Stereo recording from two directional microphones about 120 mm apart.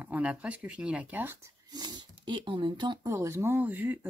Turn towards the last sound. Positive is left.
turn(degrees=-15)  # may be behind; listen again after turning